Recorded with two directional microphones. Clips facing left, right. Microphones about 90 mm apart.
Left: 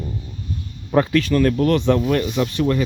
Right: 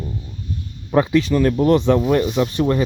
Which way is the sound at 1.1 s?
20° right (ahead or behind).